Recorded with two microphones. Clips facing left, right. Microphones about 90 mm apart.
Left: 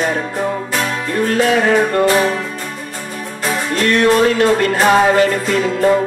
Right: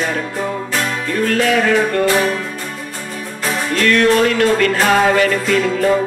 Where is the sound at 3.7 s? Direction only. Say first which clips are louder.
Even; 30° left (ahead or behind).